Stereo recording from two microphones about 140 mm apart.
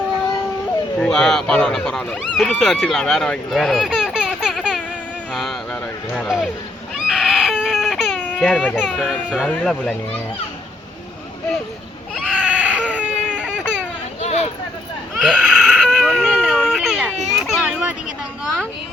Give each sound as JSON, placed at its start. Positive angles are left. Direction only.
{"t": 0.9, "sound": "speech", "side_deg": 5}
{"t": 6.9, "sound": "baby cry", "side_deg": 0}
{"t": 8.4, "sound": "speech", "side_deg": 5}
{"t": 12.2, "sound": "baby cry", "side_deg": -10}
{"t": 14.2, "sound": "a sound", "side_deg": 50}
{"t": 15.1, "sound": "baby cry", "side_deg": -5}
{"t": 17.2, "sound": "children playing", "side_deg": 0}